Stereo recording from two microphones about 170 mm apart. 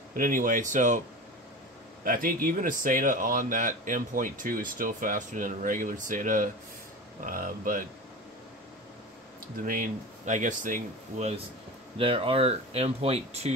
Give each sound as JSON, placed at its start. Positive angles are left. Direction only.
{"t": 0.1, "sound": "speech", "side_deg": -55}
{"t": 2.0, "sound": "speech", "side_deg": -55}
{"t": 9.6, "sound": "speech", "side_deg": -55}
{"t": 12.0, "sound": "speech", "side_deg": -30}